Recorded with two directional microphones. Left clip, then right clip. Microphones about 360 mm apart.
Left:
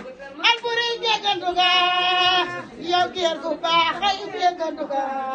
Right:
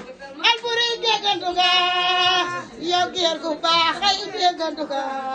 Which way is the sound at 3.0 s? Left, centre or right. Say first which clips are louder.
Right 1 dB; right.